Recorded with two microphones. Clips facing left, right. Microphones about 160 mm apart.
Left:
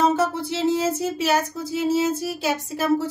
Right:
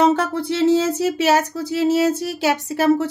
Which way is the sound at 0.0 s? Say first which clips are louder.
Right 3 dB; 70° right (ahead or behind).